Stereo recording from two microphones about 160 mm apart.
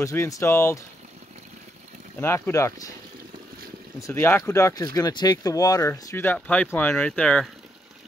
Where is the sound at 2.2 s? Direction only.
15° left (ahead or behind).